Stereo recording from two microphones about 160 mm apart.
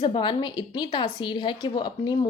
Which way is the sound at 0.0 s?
30° left (ahead or behind).